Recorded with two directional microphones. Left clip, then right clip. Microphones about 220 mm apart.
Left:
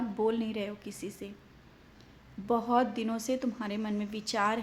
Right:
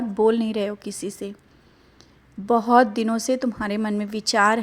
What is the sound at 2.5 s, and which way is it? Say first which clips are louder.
A woman's voice: right 11 dB; 35° right (ahead or behind).